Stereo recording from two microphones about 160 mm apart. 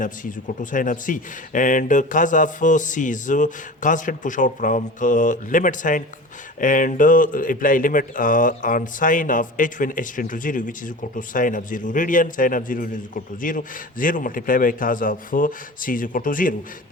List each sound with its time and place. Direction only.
0.0 s speech: 55° left (ahead or behind)